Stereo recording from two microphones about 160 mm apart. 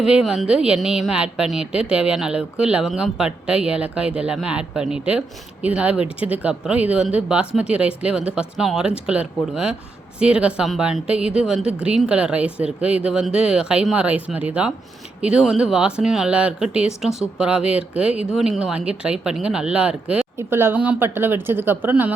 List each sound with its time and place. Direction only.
0.0 s a woman's voice: 5° right (ahead or behind)